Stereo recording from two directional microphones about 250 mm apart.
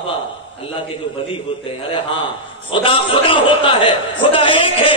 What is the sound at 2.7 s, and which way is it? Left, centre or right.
A man's voice, left.